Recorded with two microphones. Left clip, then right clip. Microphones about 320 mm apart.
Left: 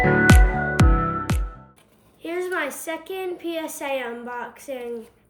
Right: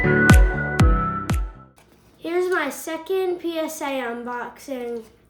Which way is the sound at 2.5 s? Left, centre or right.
Centre.